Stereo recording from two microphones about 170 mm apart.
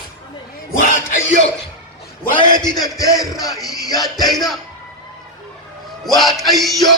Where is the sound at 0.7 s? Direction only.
55° left (ahead or behind).